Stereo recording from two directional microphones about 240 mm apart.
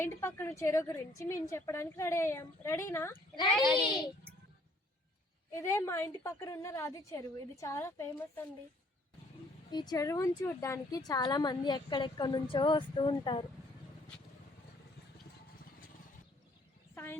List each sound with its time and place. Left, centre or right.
0.0 s a woman's voice: centre
3.5 s a child's voice: centre
5.5 s a woman's voice: centre
9.7 s a woman's voice: centre
16.9 s speech: centre